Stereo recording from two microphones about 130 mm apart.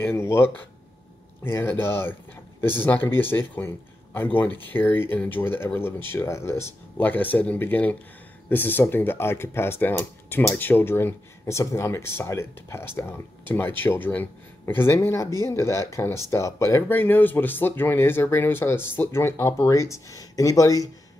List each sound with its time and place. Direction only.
0.0 s speech: 20° left (ahead or behind)